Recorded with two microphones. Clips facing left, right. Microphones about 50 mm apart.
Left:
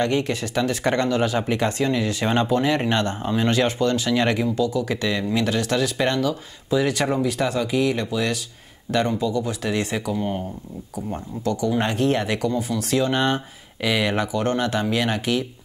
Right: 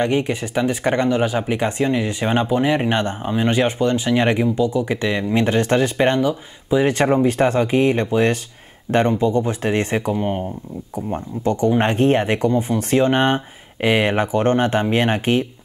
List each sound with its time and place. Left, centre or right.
0.0 s speech: right